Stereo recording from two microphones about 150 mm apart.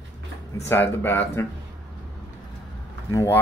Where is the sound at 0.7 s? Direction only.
15° left (ahead or behind).